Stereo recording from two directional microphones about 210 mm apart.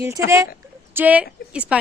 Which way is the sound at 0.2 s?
10° right (ahead or behind).